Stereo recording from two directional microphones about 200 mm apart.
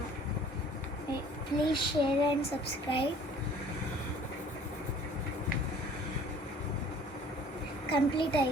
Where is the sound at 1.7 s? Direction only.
25° left (ahead or behind).